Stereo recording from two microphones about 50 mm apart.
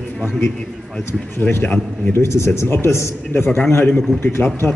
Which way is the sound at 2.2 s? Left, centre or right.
Left.